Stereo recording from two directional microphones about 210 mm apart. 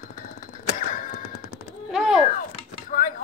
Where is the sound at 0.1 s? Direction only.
40° left (ahead or behind).